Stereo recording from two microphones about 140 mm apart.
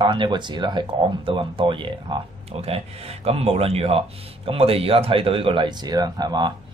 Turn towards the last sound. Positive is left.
turn(degrees=-30)  # may be behind; listen again after turning